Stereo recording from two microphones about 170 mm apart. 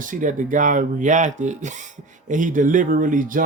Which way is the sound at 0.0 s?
50° right (ahead or behind).